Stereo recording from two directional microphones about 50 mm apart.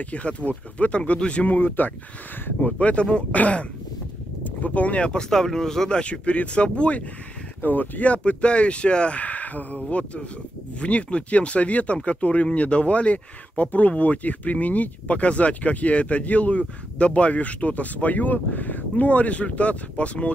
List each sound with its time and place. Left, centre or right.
0.0 s speech: left
1.5 s speech: left
5.3 s speech: centre
7.6 s speech: left